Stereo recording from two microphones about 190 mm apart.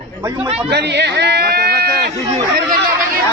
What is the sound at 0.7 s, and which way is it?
Speech, 60° right (ahead or behind).